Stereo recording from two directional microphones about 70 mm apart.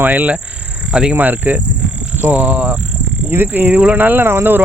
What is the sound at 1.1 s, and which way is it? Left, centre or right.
Speech, right.